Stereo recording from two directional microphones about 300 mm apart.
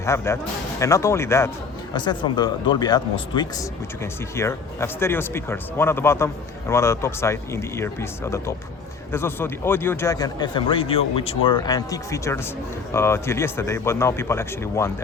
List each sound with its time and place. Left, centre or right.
0.0 s speech: centre